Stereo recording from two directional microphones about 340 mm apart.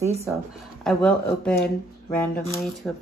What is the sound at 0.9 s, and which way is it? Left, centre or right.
Speech, centre.